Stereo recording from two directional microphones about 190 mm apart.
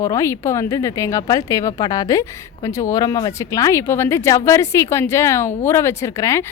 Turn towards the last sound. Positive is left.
turn(degrees=15)  # may be behind; listen again after turning